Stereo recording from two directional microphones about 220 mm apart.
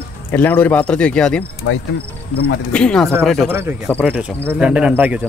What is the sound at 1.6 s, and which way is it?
Speech, 70° left (ahead or behind).